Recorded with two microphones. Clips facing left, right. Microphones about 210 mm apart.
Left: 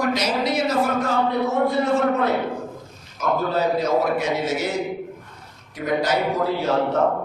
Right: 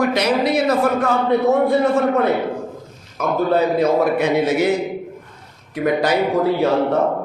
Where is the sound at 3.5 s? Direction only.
60° right (ahead or behind).